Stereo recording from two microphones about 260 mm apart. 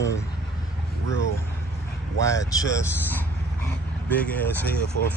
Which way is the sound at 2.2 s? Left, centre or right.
Centre.